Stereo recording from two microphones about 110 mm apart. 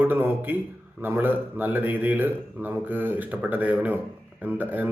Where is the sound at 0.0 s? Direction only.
20° right (ahead or behind).